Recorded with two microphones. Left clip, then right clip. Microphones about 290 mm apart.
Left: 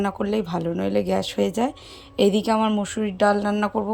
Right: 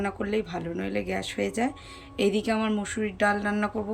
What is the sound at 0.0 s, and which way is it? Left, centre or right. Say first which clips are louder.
Speech: left 4 dB; centre.